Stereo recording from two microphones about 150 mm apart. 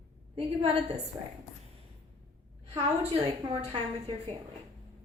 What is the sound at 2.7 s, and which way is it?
A woman's voice, 40° right (ahead or behind).